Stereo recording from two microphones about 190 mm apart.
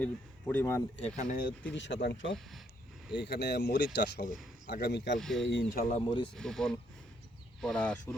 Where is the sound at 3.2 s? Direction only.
60° left (ahead or behind).